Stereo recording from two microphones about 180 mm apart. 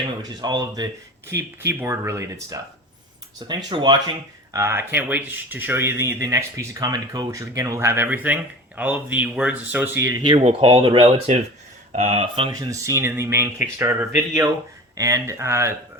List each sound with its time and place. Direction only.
0.2 s speech: 25° right (ahead or behind)
4.5 s speech: 15° right (ahead or behind)